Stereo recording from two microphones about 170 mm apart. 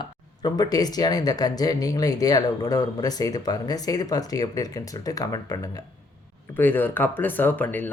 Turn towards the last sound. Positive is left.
turn(degrees=10)  # may be behind; listen again after turning